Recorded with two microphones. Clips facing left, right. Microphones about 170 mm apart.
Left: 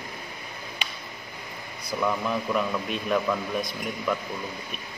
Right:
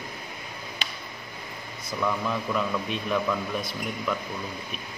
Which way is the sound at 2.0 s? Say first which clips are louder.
Left 1 dB; 10° left (ahead or behind).